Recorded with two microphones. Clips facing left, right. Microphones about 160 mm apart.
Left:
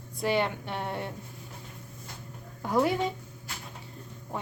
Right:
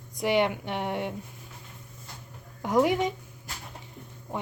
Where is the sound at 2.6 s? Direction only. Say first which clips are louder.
Right 3 dB; 15° right (ahead or behind).